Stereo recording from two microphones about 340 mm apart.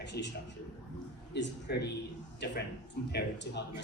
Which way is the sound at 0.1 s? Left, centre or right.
Left.